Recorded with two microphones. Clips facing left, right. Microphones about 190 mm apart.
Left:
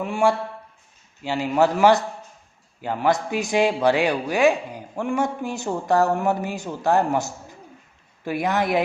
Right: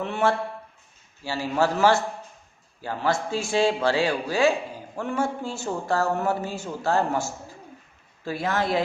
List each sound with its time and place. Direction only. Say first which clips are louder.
0.0 s a man's voice: left 3 dB; 10° left (ahead or behind)